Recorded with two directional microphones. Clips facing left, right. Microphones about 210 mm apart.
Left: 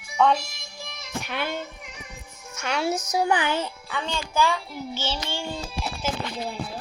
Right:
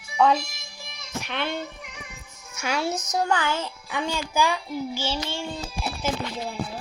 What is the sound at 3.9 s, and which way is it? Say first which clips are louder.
A child's voice: right 5 dB; 10° right (ahead or behind).